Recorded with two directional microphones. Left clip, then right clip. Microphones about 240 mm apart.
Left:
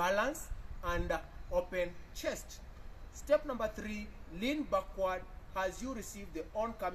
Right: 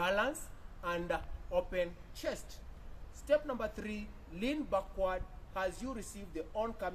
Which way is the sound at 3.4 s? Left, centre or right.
Centre.